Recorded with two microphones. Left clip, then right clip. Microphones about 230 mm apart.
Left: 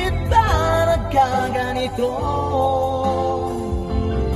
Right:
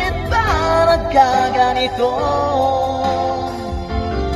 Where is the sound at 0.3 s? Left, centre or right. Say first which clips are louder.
Right 1 dB; right.